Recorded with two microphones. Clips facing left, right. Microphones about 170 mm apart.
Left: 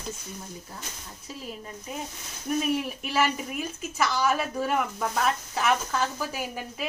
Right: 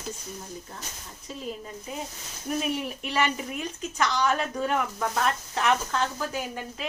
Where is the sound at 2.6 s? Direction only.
Centre (ahead or behind).